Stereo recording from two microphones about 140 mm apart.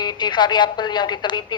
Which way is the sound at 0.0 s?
35° left (ahead or behind).